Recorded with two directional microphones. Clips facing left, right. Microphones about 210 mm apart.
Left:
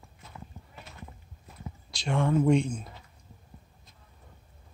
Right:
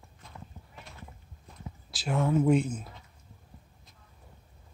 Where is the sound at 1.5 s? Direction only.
5° left (ahead or behind).